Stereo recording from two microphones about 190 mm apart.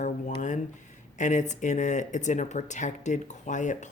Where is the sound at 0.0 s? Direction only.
40° left (ahead or behind).